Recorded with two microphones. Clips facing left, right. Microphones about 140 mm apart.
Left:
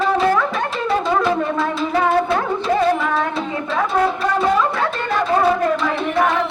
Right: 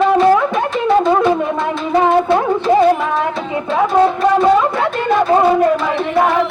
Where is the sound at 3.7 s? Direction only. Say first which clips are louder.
Right 6 dB; 25° right (ahead or behind).